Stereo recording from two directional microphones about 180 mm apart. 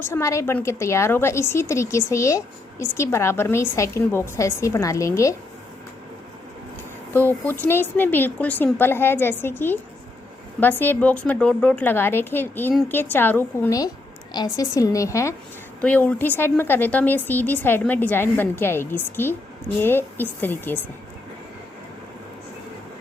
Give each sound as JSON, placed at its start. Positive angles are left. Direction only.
{"t": 0.0, "sound": "speech", "side_deg": 15}
{"t": 7.1, "sound": "a woman's voice", "side_deg": 10}